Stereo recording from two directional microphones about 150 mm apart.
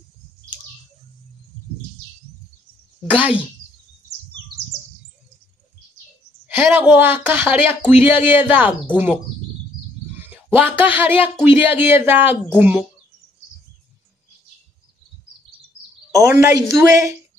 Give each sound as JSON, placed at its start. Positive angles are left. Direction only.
{"t": 3.1, "sound": "speech", "side_deg": -10}
{"t": 6.4, "sound": "speech", "side_deg": -15}
{"t": 10.3, "sound": "speech", "side_deg": -10}
{"t": 16.2, "sound": "a woman's voice", "side_deg": -20}